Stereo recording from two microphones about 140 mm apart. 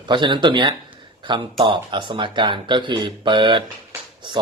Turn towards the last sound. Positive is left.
turn(degrees=-35)  # may be behind; listen again after turning